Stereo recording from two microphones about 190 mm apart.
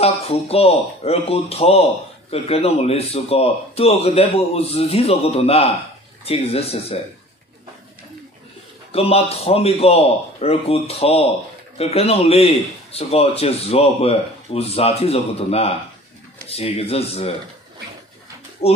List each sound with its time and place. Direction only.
0.0 s a man's voice: 30° left (ahead or behind)
8.9 s a man's voice: 30° left (ahead or behind)
18.6 s speech: 30° left (ahead or behind)